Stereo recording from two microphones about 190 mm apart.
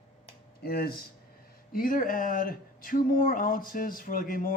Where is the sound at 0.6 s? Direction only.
55° left (ahead or behind).